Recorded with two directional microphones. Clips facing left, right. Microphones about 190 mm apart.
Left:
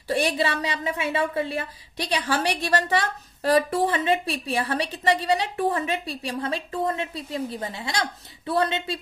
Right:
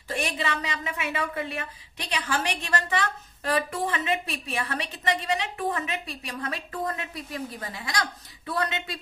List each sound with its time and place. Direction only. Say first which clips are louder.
0.1 s a woman's voice: left 6 dB; 35° left (ahead or behind)